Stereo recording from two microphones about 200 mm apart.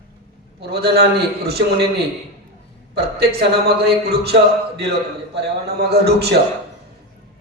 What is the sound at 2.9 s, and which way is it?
A man's voice, 55° right (ahead or behind).